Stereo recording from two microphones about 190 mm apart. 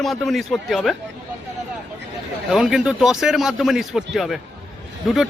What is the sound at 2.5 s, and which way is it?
Speech, centre (ahead or behind).